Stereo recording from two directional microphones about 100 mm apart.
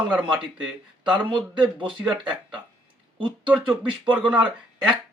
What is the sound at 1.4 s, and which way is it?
Speech, 50° right (ahead or behind).